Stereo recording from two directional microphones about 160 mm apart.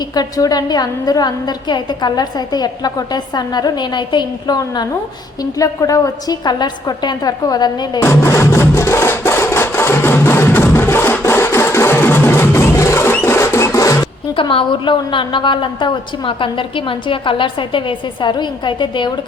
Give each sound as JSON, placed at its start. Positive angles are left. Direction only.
{"t": 0.1, "sound": "a woman's voice", "side_deg": 25}
{"t": 8.0, "sound": "music", "side_deg": 15}
{"t": 14.3, "sound": "a woman's voice", "side_deg": 30}